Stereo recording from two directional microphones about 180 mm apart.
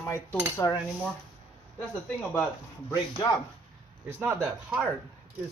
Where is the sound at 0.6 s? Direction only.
20° left (ahead or behind).